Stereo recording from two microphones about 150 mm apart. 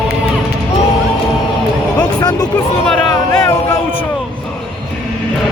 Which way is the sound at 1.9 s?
25° left (ahead or behind).